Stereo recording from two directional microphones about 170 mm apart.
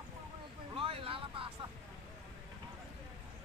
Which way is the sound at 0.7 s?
35° right (ahead or behind).